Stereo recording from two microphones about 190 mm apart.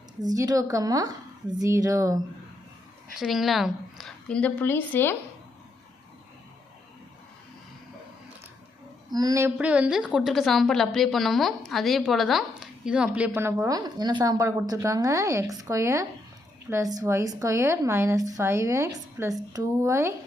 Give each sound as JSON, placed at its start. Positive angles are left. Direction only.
{"t": 0.2, "sound": "a woman's voice", "side_deg": -20}
{"t": 3.2, "sound": "a woman's voice", "side_deg": 0}
{"t": 9.1, "sound": "a woman's voice", "side_deg": -20}